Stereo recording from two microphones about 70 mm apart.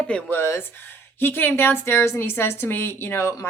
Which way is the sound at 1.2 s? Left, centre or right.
Left.